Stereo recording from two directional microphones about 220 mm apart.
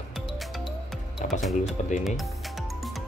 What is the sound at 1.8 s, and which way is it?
Speech, 30° left (ahead or behind).